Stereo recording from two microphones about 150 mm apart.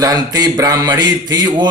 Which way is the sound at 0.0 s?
25° right (ahead or behind).